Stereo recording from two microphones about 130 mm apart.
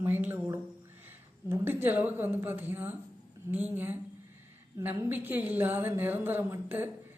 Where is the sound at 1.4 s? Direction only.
15° right (ahead or behind).